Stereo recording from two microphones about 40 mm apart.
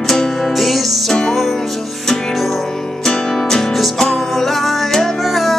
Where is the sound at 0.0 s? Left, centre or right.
Centre.